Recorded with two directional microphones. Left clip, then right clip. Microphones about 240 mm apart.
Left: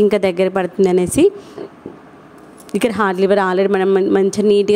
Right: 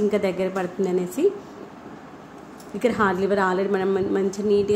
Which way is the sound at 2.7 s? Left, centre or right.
Left.